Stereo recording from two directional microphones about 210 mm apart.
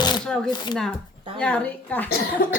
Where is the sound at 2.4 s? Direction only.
45° left (ahead or behind).